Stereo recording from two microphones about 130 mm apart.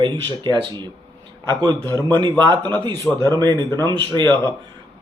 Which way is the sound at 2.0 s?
35° right (ahead or behind).